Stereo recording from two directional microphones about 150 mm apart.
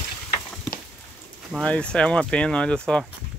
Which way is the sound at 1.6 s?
5° left (ahead or behind).